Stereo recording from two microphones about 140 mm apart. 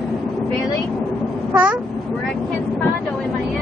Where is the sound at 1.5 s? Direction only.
10° right (ahead or behind).